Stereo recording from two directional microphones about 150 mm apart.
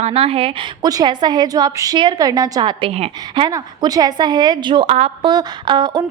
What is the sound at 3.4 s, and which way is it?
A woman's voice, 25° right (ahead or behind).